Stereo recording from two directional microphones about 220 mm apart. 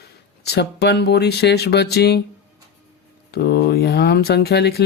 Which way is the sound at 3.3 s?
50° left (ahead or behind).